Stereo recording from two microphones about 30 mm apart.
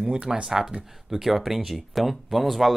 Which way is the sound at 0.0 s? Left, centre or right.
Right.